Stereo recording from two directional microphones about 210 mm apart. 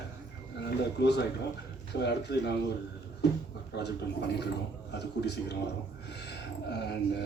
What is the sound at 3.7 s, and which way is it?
Speech, 55° left (ahead or behind).